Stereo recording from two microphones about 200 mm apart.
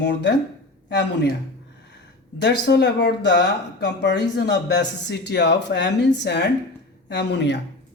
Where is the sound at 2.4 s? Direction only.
60° left (ahead or behind).